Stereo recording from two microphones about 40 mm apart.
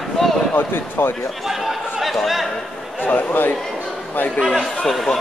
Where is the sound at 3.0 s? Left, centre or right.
Left.